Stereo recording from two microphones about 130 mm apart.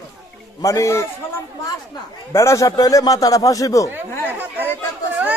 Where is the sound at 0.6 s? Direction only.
25° left (ahead or behind).